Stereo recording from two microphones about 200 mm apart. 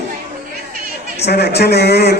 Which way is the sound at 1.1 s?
55° left (ahead or behind).